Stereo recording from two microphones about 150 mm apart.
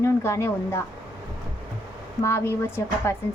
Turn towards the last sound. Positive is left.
turn(degrees=15)  # may be behind; listen again after turning